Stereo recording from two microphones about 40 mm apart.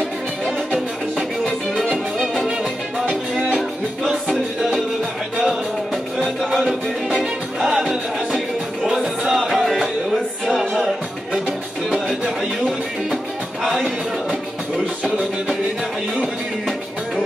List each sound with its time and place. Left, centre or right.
2.1 s music: centre
6.7 s music: centre
8.9 s music: centre
9.3 s music: centre
10.4 s music: centre